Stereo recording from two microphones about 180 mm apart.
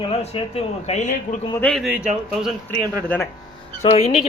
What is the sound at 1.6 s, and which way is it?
Speech, centre (ahead or behind).